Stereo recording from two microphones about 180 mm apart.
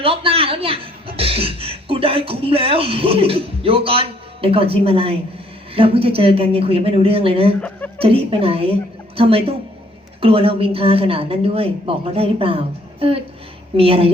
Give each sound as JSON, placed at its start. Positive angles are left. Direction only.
{"t": 0.0, "sound": "speech", "side_deg": -30}